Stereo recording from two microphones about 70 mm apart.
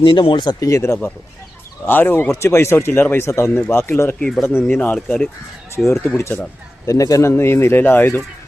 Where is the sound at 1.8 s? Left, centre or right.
Left.